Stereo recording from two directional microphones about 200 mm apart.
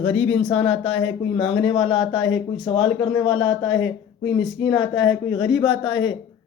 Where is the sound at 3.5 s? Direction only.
65° left (ahead or behind).